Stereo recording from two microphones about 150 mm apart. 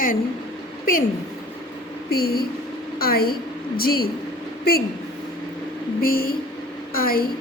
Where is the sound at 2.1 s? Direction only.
90° left.